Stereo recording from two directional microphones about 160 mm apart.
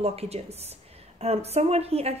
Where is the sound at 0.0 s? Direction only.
40° right (ahead or behind).